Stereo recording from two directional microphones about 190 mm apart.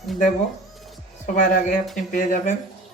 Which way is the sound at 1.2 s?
45° left (ahead or behind).